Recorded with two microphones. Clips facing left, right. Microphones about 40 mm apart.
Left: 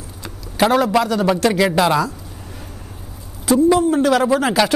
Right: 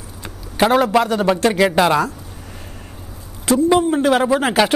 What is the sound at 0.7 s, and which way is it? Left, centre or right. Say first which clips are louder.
Speech: right 1 dB; right.